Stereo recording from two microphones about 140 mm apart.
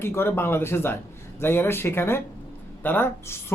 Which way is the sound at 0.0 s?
15° left (ahead or behind).